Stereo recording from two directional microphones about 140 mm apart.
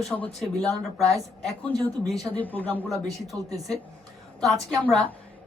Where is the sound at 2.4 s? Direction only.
10° left (ahead or behind).